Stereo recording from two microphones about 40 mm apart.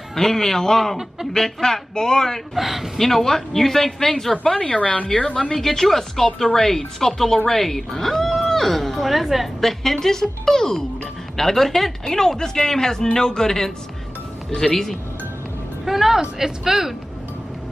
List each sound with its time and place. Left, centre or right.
0.1 s speech: centre
2.5 s speech: centre
3.0 s speech: centre
4.6 s a woman's voice: left
5.5 s a woman's voice: centre
15.8 s vehicle: centre
16.2 s speech: centre